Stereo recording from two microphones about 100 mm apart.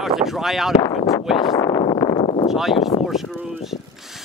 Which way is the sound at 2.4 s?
Centre (ahead or behind).